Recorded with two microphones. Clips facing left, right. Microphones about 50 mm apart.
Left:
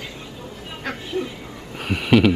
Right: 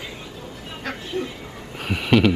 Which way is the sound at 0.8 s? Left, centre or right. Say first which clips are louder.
Left 1 dB; centre.